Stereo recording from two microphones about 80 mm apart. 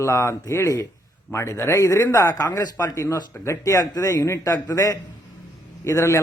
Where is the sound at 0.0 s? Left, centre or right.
Left.